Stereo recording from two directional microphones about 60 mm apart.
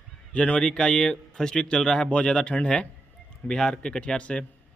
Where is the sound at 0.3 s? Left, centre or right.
Centre.